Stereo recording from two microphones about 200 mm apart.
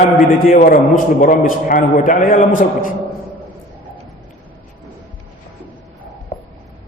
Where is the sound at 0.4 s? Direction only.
45° left (ahead or behind).